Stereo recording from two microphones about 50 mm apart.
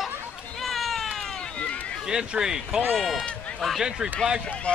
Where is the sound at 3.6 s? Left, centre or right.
Centre.